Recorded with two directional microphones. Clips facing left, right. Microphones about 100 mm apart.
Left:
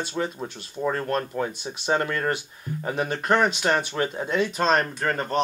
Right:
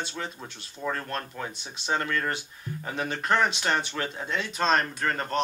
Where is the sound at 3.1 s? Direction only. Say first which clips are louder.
Left 3 dB; 40° left (ahead or behind).